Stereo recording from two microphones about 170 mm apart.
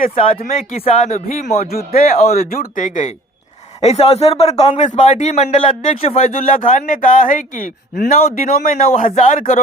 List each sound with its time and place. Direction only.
0.9 s speech: 40° left (ahead or behind)
1.7 s speech: 60° left (ahead or behind)
2.1 s speech: 40° left (ahead or behind)
2.5 s a man's voice: 55° left (ahead or behind)
3.8 s a man's voice: 35° left (ahead or behind)